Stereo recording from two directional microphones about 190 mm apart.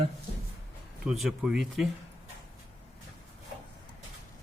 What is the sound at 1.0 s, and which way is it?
Speech, centre (ahead or behind).